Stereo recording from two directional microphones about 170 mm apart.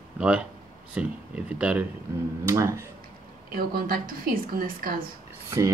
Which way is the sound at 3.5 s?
60° right (ahead or behind).